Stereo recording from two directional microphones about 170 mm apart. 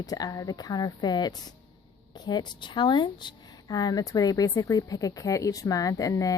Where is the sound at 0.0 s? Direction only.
20° left (ahead or behind).